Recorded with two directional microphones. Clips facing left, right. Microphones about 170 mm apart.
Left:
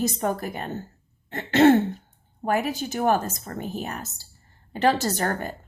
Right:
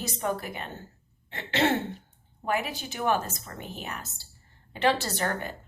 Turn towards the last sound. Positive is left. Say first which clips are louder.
# left 5 dB
turn(degrees=45)  # may be behind; listen again after turning